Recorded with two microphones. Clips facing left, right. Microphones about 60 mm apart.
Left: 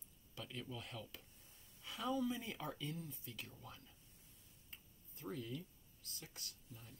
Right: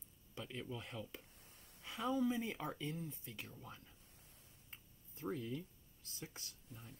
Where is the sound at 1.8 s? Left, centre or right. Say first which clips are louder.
Right 2 dB; right.